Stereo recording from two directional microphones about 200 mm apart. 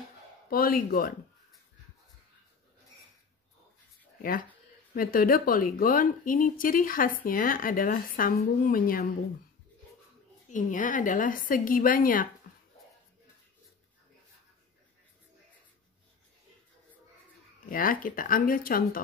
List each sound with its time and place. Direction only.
0.5 s a woman's voice: 45° left (ahead or behind)
4.2 s a woman's voice: 45° left (ahead or behind)
10.5 s a woman's voice: 40° left (ahead or behind)
17.6 s a woman's voice: 45° left (ahead or behind)